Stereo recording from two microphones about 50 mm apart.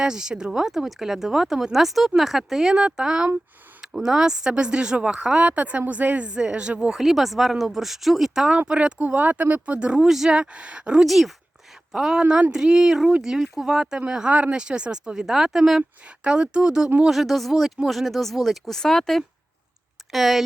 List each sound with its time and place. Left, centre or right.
0.0 s speech: centre
5.5 s speech: right
6.9 s speech: centre
9.0 s speech: right
11.0 s speech: centre
14.3 s speech: right
14.6 s speech: centre
17.1 s speech: centre
20.1 s speech: centre